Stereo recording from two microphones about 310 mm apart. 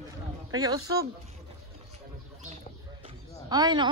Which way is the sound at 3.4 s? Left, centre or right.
Centre.